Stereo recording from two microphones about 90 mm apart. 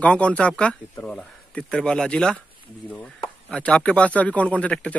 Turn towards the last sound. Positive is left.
turn(degrees=15)  # may be behind; listen again after turning